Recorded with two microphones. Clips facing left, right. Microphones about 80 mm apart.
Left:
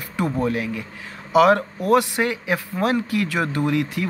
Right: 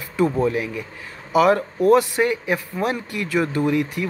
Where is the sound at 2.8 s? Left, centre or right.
Left.